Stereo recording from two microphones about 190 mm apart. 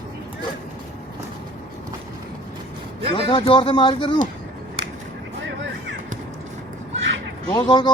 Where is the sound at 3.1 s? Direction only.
25° left (ahead or behind).